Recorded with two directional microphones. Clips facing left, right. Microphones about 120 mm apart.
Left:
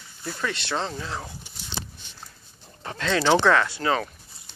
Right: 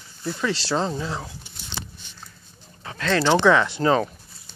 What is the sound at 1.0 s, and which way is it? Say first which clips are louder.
Speech: right 3 dB; 5° right (ahead or behind).